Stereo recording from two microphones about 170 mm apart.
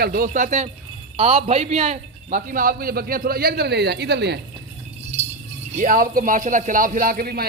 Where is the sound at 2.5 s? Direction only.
55° right (ahead or behind); by 4.3 s 80° right.